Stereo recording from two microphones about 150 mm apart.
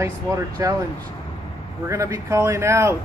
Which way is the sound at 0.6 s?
20° right (ahead or behind).